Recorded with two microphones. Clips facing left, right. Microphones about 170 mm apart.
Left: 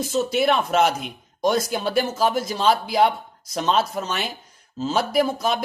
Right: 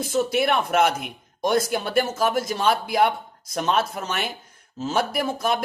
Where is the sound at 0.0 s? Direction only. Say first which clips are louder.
Left 1 dB; 55° right (ahead or behind).